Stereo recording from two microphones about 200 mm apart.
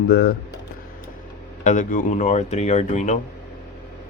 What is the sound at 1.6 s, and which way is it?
Speech, 40° left (ahead or behind).